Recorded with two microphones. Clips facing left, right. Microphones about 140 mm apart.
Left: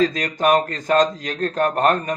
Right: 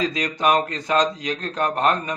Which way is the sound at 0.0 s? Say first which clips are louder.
Left 3 dB; 45° left (ahead or behind).